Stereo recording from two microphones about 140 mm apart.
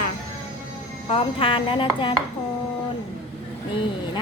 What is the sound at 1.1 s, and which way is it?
Speech, 40° left (ahead or behind).